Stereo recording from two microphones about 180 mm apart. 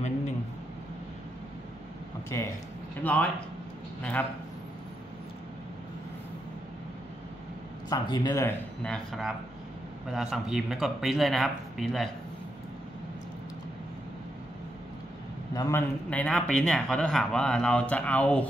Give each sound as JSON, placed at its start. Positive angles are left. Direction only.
{"t": 2.3, "sound": "a man's voice", "side_deg": 15}
{"t": 7.9, "sound": "speech", "side_deg": 20}
{"t": 8.8, "sound": "speech", "side_deg": 5}
{"t": 15.5, "sound": "a man's voice", "side_deg": 20}
{"t": 16.1, "sound": "speech", "side_deg": 5}